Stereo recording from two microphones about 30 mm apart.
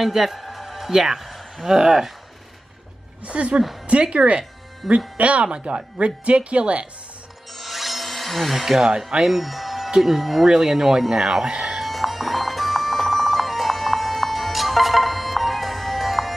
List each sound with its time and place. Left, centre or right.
0.0 s speech: centre
1.2 s a sound: centre
1.7 s speech: centre
3.3 s speech: right
4.4 s music: right
5.1 s speech: right
7.5 s wood: centre
8.7 s speech: right
9.2 s speech: centre
10.5 s speech: centre
11.4 s speech: right
11.8 s music: centre